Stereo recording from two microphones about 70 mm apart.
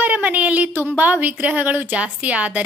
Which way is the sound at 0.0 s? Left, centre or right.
Right.